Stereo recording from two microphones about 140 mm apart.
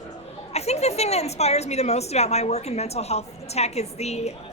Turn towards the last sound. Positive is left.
turn(degrees=50)  # may be behind; listen again after turning